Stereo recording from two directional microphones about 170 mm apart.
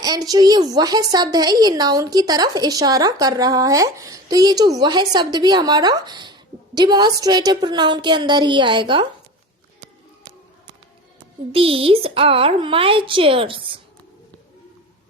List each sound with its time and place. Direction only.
0.0 s a woman's voice: 20° right (ahead or behind)
11.5 s a woman's voice: 35° right (ahead or behind)